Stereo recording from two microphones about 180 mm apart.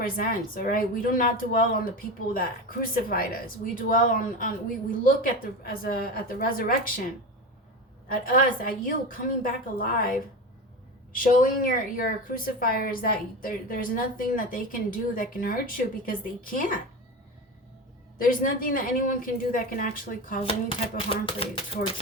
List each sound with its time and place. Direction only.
0.0 s speech: 50° left (ahead or behind)
8.2 s speech: 50° left (ahead or behind)
18.2 s speech: 50° left (ahead or behind)
20.4 s speech: 30° left (ahead or behind)